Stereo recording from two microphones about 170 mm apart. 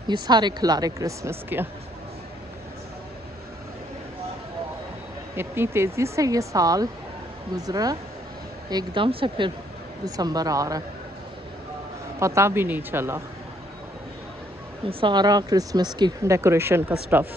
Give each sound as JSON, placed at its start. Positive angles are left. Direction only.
{"t": 0.1, "sound": "speech", "side_deg": -25}
{"t": 5.3, "sound": "speech", "side_deg": -15}
{"t": 12.2, "sound": "speech", "side_deg": -15}
{"t": 14.9, "sound": "speech", "side_deg": -30}